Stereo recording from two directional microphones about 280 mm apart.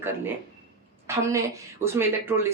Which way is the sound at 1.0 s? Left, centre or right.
Centre.